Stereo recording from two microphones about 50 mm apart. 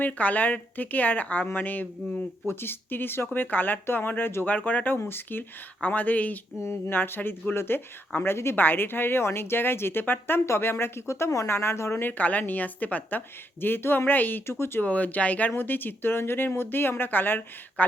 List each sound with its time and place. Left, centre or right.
0.0 s a woman's voice: left
2.5 s a woman's voice: left
4.4 s a woman's voice: left
4.9 s a woman's voice: left
6.6 s speech: left
6.9 s speech: left
10.4 s speech: left
10.7 s speech: left
11.4 s speech: left
12.1 s a woman's voice: left
14.4 s speech: left
14.8 s a woman's voice: left
15.5 s a woman's voice: left